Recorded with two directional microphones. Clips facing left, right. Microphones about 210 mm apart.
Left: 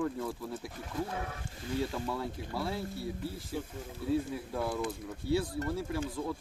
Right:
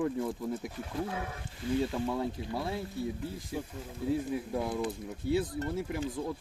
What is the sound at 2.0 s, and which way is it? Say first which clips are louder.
Speech: right 4 dB; 20° right (ahead or behind).